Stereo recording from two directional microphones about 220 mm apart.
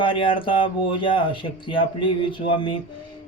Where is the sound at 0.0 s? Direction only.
25° left (ahead or behind).